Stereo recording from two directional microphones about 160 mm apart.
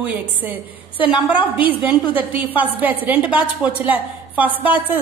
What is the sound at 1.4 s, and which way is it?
Speech, 30° left (ahead or behind).